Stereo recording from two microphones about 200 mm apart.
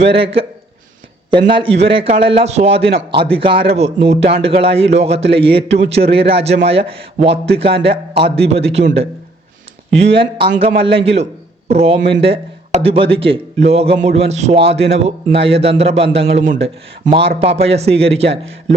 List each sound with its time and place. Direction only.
0.1 s a man's voice: 30° right (ahead or behind)
10.0 s a man's voice: 30° right (ahead or behind)